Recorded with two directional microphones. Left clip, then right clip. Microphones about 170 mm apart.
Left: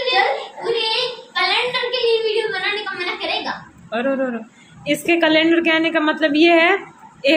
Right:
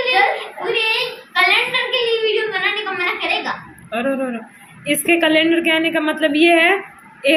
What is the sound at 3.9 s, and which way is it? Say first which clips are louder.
A woman's voice: even; centre (ahead or behind).